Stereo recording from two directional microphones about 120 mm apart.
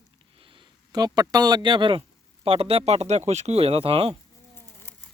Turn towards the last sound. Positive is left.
turn(degrees=-55)  # may be behind; listen again after turning